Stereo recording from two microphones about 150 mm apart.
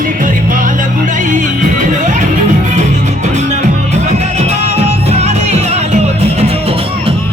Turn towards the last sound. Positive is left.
turn(degrees=-40)  # may be behind; listen again after turning